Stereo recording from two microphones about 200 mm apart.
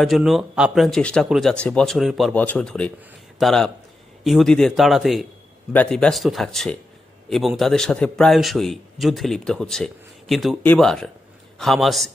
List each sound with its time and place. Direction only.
0.0 s a man's voice: centre (ahead or behind)